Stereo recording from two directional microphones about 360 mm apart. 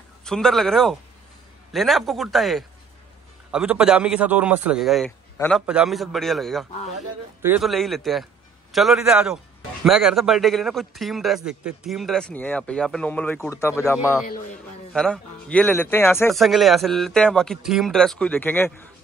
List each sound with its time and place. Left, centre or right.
0.2 s a man's voice: centre
14.2 s a man's voice: left
14.9 s a man's voice: centre